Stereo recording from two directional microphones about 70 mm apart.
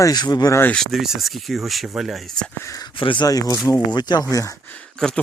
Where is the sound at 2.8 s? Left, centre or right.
Left.